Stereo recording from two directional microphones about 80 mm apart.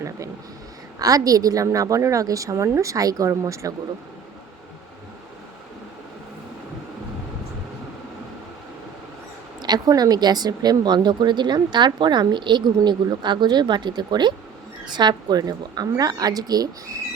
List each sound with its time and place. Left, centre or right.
0.9 s a woman's voice: right
9.6 s a woman's voice: right